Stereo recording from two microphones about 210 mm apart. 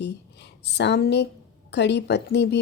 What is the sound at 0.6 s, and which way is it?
A woman's voice, 55° left (ahead or behind).